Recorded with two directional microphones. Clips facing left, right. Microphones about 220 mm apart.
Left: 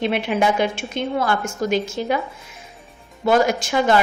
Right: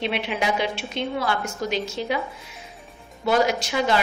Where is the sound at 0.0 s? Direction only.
45° left (ahead or behind).